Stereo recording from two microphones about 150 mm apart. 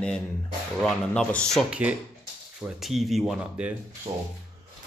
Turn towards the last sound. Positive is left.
turn(degrees=-35)  # may be behind; listen again after turning